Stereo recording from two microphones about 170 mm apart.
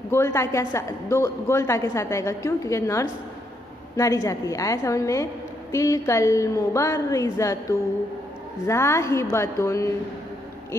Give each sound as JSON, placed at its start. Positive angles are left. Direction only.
{"t": 0.1, "sound": "a woman's voice", "side_deg": 15}
{"t": 8.6, "sound": "a woman's voice", "side_deg": 15}